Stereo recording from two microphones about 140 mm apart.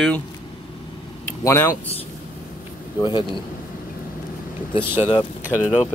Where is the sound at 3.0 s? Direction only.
35° left (ahead or behind).